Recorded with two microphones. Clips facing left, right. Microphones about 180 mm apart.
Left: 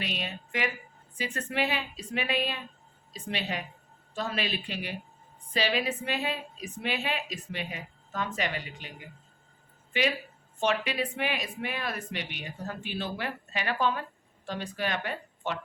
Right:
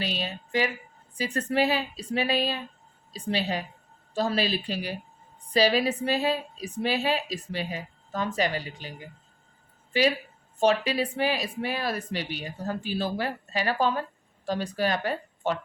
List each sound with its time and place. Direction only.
0.0 s a woman's voice: 35° right (ahead or behind)